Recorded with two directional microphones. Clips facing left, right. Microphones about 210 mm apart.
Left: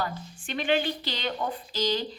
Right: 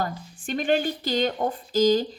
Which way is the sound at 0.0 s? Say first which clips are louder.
Right 3 dB; 45° right (ahead or behind).